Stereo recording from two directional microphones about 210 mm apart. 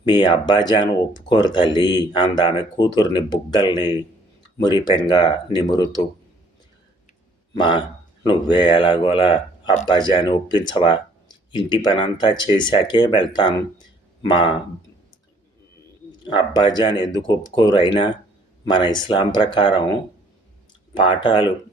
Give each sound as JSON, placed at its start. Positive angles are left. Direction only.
{"t": 0.0, "sound": "speech", "side_deg": 20}
{"t": 7.5, "sound": "a man's voice", "side_deg": 20}
{"t": 13.7, "sound": "a sound", "side_deg": 20}
{"t": 16.2, "sound": "speech", "side_deg": 20}